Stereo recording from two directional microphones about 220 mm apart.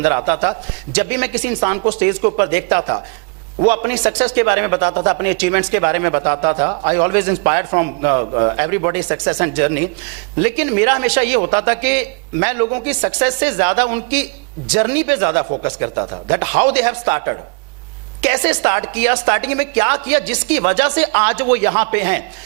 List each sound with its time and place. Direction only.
0.0 s speech: 15° right (ahead or behind)
4.0 s speech: 15° right (ahead or behind)